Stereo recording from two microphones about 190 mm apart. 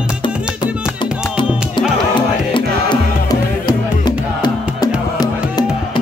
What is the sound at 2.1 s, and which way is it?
Music, 25° left (ahead or behind).